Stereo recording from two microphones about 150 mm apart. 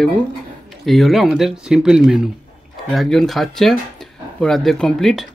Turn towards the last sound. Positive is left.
turn(degrees=0)  # may be behind; listen again after turning